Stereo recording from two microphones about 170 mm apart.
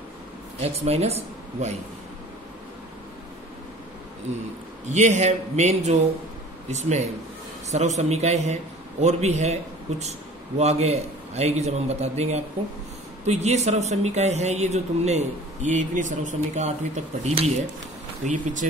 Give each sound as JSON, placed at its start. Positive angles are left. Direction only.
{"t": 0.6, "sound": "speech", "side_deg": -40}
{"t": 4.8, "sound": "a man's voice", "side_deg": -45}
{"t": 18.2, "sound": "a man's voice", "side_deg": -50}